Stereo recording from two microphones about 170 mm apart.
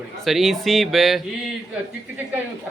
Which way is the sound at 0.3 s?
Centre (ahead or behind).